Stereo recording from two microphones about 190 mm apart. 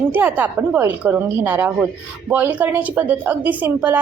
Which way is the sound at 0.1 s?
10° right (ahead or behind).